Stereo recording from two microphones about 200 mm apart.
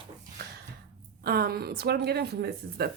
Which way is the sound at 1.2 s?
50° right (ahead or behind).